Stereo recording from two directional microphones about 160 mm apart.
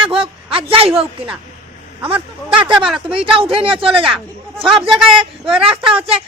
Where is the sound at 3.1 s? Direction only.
35° right (ahead or behind).